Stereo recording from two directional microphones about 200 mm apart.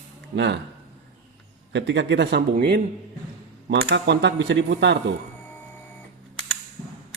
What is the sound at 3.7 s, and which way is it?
Speech, 60° right (ahead or behind).